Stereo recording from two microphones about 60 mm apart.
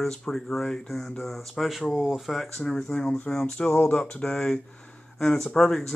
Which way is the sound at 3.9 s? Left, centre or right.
Left.